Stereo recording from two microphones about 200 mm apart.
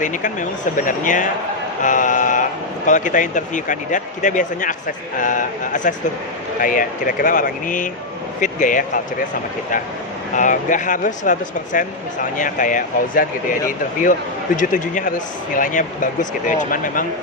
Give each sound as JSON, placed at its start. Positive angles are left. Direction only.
{"t": 0.0, "sound": "speech", "side_deg": 40}
{"t": 10.3, "sound": "speech", "side_deg": 40}